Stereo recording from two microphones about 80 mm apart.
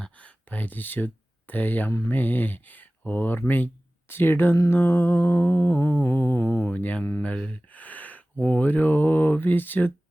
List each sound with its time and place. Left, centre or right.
0.0 s a sound: centre
2.0 s mantra: left
7.2 s speech: centre